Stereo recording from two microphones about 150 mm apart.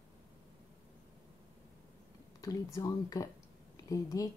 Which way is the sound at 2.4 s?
25° left (ahead or behind).